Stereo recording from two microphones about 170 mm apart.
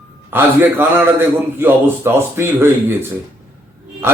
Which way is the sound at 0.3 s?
10° right (ahead or behind).